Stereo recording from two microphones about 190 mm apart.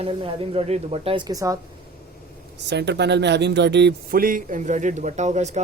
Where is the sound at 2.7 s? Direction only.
65° right (ahead or behind); by 5.6 s 35° right (ahead or behind).